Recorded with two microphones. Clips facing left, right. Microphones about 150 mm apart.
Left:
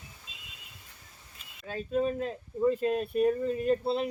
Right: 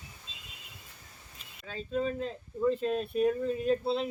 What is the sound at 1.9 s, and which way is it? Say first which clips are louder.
Speech: left 3 dB; 10° left (ahead or behind).